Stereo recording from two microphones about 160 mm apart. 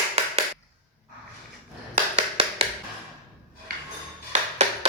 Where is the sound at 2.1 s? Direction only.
40° right (ahead or behind).